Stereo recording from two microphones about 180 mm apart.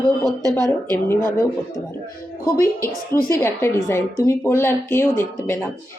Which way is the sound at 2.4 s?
15° left (ahead or behind).